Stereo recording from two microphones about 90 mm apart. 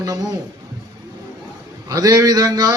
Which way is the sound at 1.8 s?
45° right (ahead or behind).